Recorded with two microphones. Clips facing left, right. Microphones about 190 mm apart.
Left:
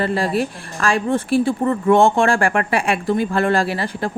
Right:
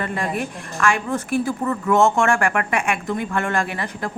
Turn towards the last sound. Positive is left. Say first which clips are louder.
# left 5 dB
turn(degrees=30)  # may be behind; listen again after turning